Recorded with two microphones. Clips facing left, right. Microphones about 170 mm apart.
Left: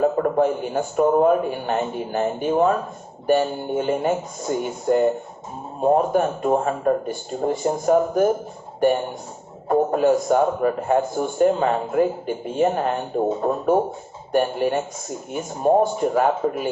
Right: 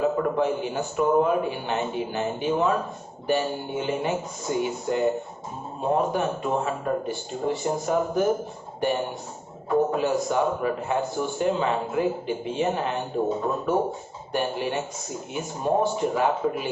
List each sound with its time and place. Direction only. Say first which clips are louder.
0.0 s a man's voice: left 4 dB; 45° left (ahead or behind)
9.6 s a man's voice: left 5 dB; 45° left (ahead or behind)
14.3 s a man's voice: left 6 dB; 40° left (ahead or behind)